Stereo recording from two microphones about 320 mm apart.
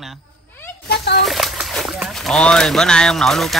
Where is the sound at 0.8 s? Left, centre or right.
Left.